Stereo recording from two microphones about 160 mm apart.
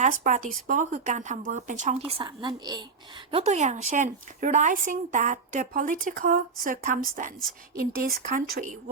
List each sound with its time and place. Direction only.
0.0 s speech: 50° right (ahead or behind)
2.0 s a woman's voice: 35° right (ahead or behind)
3.3 s speech: 45° right (ahead or behind)
7.8 s speech: 65° right (ahead or behind)